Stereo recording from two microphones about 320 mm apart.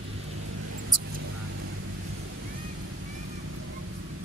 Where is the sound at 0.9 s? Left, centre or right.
Right.